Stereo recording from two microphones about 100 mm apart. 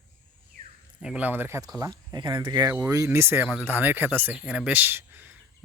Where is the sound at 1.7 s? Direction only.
40° right (ahead or behind).